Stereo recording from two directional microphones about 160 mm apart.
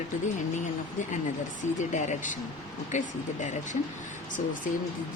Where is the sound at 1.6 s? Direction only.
50° left (ahead or behind).